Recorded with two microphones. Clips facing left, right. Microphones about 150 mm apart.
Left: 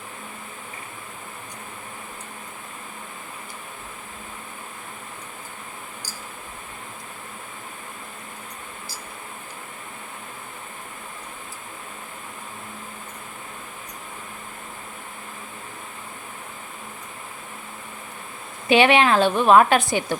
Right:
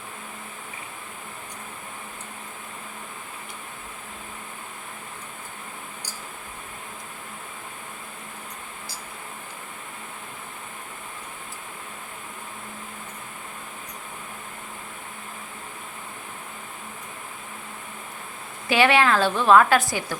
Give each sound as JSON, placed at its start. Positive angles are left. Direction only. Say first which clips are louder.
{"t": 18.7, "sound": "a woman's voice", "louder": "left 3 dB", "side_deg": 20}